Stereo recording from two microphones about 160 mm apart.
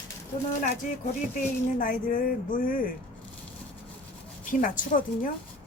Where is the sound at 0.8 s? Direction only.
60° left (ahead or behind).